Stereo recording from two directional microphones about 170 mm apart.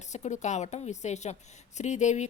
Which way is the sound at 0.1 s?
45° left (ahead or behind).